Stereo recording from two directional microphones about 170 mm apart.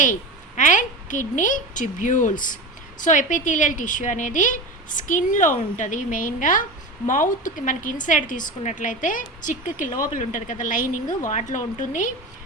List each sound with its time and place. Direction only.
0.0 s a woman's voice: 50° left (ahead or behind)